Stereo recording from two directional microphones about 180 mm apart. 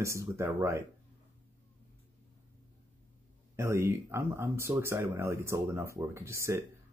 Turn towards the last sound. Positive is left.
turn(degrees=-15)  # may be behind; listen again after turning